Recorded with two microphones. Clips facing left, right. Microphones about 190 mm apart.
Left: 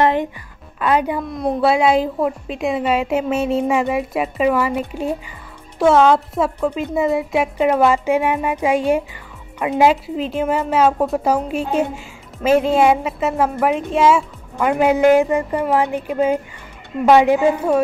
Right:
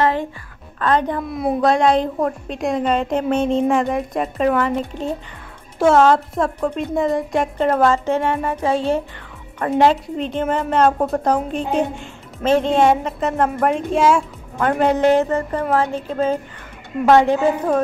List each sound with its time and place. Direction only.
0.0 s music: 20° left (ahead or behind)
0.7 s a woman's voice: 10° left (ahead or behind)
1.2 s a woman's voice: 5° right (ahead or behind)
1.6 s a woman's voice: 5° left (ahead or behind)